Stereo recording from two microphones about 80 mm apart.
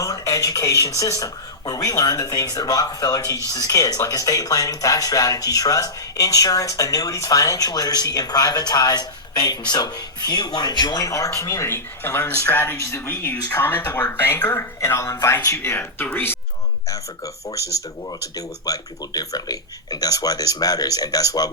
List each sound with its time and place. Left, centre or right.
0.0 s speech: left
11.7 s speech: left
12.7 s speech: left
13.5 s speech: left
14.8 s speech: left
16.9 s speech: left